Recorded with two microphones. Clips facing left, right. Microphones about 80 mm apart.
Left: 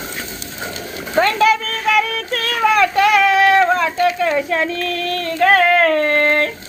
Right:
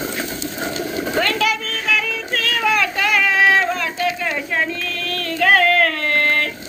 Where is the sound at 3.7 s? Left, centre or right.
Left.